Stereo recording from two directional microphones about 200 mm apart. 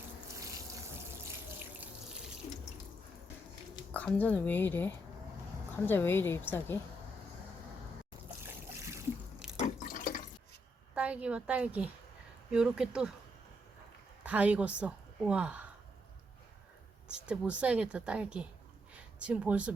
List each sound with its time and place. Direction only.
0.3 s sink: 15° right (ahead or behind)
3.9 s a woman's voice: 5° left (ahead or behind)
8.4 s trickle: 15° right (ahead or behind)
9.6 s water: 40° left (ahead or behind)
10.9 s a woman's voice: 5° right (ahead or behind)
14.3 s a woman's voice: 5° right (ahead or behind)
17.2 s speech: 5° right (ahead or behind)